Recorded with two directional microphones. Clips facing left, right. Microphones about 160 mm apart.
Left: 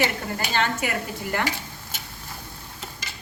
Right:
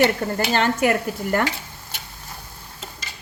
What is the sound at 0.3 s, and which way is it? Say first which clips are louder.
A woman's voice: right 5 dB; 50° right (ahead or behind).